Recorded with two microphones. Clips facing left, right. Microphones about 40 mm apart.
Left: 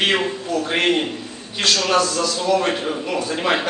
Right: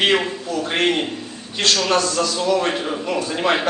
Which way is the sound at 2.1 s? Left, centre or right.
Centre.